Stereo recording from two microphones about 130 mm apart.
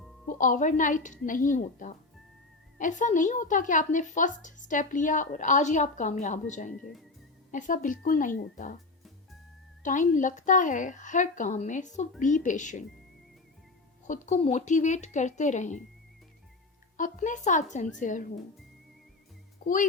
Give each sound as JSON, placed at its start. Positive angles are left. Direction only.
{"t": 0.3, "sound": "a woman's voice", "side_deg": 90}
{"t": 7.5, "sound": "a woman's voice", "side_deg": 90}
{"t": 9.8, "sound": "a woman's voice", "side_deg": 75}
{"t": 14.4, "sound": "a woman's voice", "side_deg": 65}
{"t": 17.0, "sound": "a woman's voice", "side_deg": 75}
{"t": 18.0, "sound": "a woman's voice", "side_deg": 80}
{"t": 19.6, "sound": "speech", "side_deg": 90}